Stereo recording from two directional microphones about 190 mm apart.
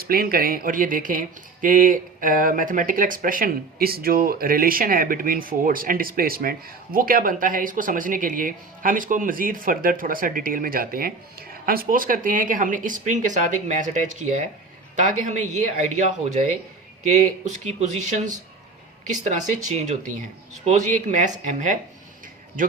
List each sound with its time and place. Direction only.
0.0 s speech: 50° right (ahead or behind)
17.7 s speech: 40° right (ahead or behind)